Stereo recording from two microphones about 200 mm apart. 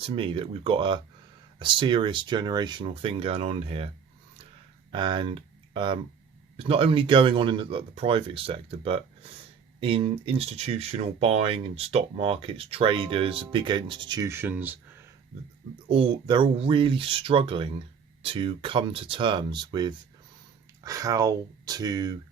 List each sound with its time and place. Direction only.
0.0 s speech: 25° right (ahead or behind)
4.9 s speech: 25° right (ahead or behind)
15.9 s speech: 25° right (ahead or behind)